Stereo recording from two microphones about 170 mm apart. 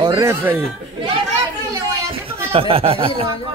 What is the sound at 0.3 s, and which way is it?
Speech, 10° right (ahead or behind).